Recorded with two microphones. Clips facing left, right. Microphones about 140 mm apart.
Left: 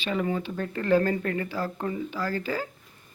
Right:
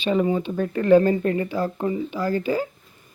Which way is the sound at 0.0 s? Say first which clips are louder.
Right 7 dB; 20° right (ahead or behind).